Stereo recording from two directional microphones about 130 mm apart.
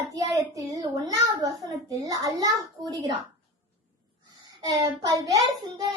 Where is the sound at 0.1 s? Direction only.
25° right (ahead or behind).